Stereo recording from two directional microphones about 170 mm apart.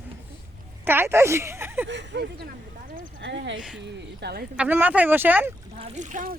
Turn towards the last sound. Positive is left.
turn(degrees=-50)  # may be behind; listen again after turning